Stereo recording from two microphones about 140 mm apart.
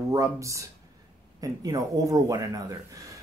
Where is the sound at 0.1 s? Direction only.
25° right (ahead or behind).